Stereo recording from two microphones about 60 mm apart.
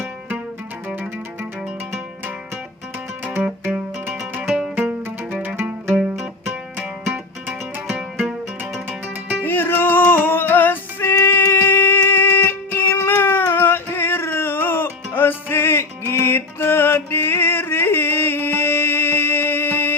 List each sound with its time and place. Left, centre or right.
3.6 s music: right
4.4 s music: centre
4.7 s music: right
9.4 s music: left
11.5 s a sound: left
15.1 s music: left